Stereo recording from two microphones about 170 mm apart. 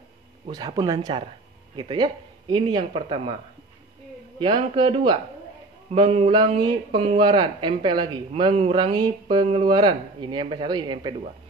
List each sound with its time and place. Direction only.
0.5 s speech: 25° right (ahead or behind)
4.4 s speech: 30° right (ahead or behind)
5.9 s a sound: 35° right (ahead or behind)
7.2 s speech: 30° right (ahead or behind)